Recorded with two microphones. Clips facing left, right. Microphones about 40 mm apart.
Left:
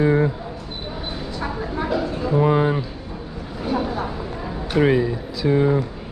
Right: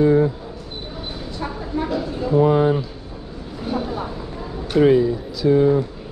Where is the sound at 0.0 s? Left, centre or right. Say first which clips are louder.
Right 2 dB; left.